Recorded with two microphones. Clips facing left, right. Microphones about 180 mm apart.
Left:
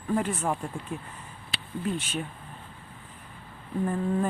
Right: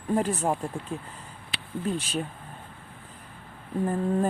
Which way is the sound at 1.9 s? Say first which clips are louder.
Right 2 dB; 35° right (ahead or behind).